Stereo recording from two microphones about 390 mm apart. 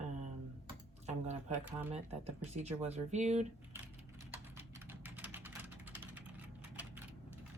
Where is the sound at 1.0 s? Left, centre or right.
Centre.